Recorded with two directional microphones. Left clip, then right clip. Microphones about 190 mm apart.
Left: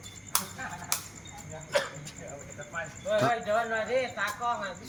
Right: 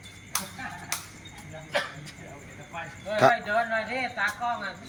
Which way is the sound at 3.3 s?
15° left (ahead or behind).